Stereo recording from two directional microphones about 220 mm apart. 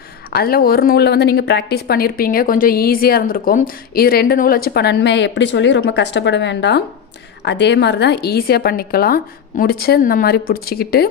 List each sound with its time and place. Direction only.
0.3 s a woman's voice: 45° left (ahead or behind)